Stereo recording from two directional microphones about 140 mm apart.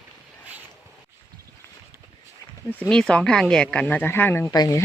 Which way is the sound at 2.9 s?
5° left (ahead or behind).